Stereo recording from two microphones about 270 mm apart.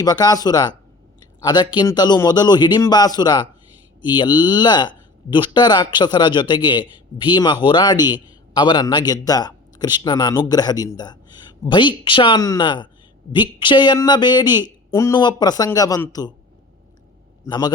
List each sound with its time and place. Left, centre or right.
0.0 s speech: centre
17.4 s a man's voice: centre